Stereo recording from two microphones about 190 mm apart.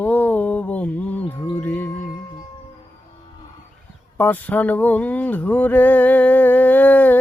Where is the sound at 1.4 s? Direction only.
20° left (ahead or behind).